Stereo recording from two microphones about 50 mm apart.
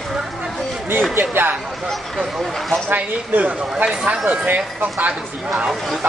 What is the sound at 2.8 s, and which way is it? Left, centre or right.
Speech, right.